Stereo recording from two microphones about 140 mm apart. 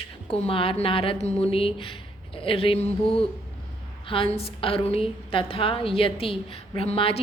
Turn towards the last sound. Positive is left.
turn(degrees=45)  # may be behind; listen again after turning